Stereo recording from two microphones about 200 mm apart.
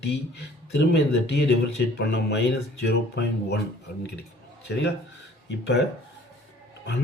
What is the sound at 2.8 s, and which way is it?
Speech, 55° left (ahead or behind).